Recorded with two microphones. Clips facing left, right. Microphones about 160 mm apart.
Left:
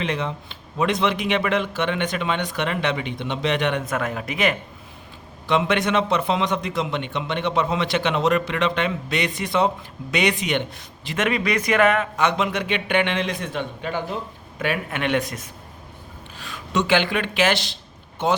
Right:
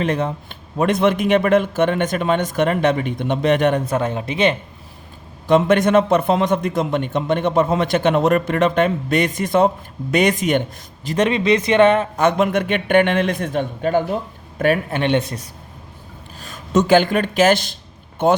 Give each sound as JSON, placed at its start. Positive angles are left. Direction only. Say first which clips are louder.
{"t": 0.0, "sound": "a man's voice", "louder": "right 5 dB", "side_deg": -45}
{"t": 3.8, "sound": "speech", "louder": "right 5 dB", "side_deg": -30}
{"t": 5.5, "sound": "a man's voice", "louder": "right 7 dB", "side_deg": -45}
{"t": 12.2, "sound": "a man's voice", "louder": "right 6 dB", "side_deg": -50}
{"t": 16.4, "sound": "a man's voice", "louder": "right 6 dB", "side_deg": -45}